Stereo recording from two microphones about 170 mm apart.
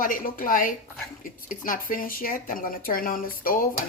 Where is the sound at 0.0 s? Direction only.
55° left (ahead or behind).